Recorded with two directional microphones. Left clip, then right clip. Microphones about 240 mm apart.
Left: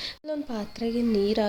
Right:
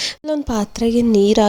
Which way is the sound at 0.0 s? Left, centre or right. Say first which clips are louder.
Right 11 dB; right.